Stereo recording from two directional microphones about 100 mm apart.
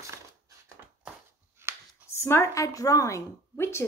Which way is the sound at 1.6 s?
25° right (ahead or behind).